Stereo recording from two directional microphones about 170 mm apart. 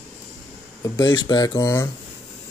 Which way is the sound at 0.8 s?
25° left (ahead or behind).